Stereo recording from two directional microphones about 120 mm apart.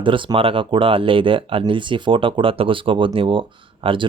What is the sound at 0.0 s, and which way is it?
Speech, 45° right (ahead or behind).